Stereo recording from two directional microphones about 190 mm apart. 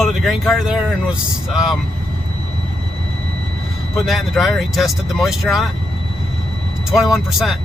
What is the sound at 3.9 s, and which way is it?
Speech, centre (ahead or behind).